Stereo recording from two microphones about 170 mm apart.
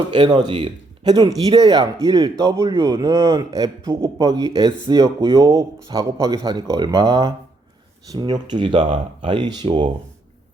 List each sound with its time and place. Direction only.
0.1 s a man's voice: 25° right (ahead or behind)